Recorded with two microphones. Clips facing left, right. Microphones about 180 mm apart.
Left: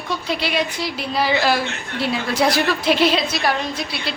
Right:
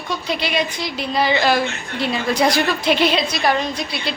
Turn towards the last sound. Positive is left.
turn(degrees=5)  # may be behind; listen again after turning